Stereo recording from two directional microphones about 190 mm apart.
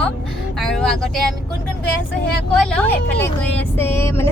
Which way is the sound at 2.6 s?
5° left (ahead or behind).